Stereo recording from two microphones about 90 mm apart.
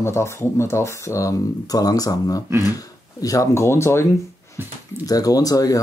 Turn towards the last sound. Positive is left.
turn(degrees=40)  # may be behind; listen again after turning